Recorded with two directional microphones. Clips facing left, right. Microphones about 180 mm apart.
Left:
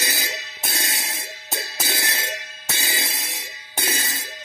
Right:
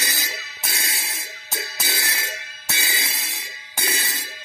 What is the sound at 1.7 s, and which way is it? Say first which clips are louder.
Music: left 3 dB; 25° left (ahead or behind).